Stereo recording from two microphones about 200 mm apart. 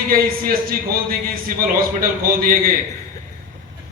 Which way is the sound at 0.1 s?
45° right (ahead or behind).